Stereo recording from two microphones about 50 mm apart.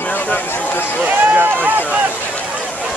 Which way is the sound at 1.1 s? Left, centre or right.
Right.